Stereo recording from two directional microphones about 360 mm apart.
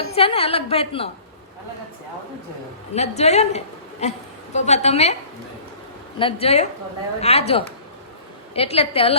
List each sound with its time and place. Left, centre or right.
0.0 s a woman's voice: centre
2.9 s a woman's voice: centre
6.1 s a woman's voice: centre